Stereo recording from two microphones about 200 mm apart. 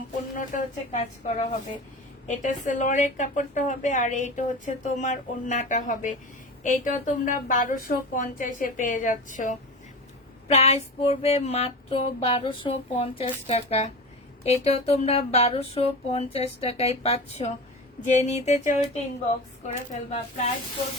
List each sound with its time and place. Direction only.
0.3 s a woman's voice: 35° left (ahead or behind)